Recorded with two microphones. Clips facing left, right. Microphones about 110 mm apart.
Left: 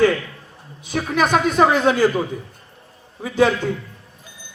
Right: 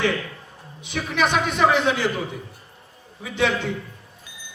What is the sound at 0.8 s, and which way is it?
A woman's voice, 40° left (ahead or behind).